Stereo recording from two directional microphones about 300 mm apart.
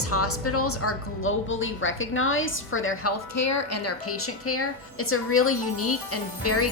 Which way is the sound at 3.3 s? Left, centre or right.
Left.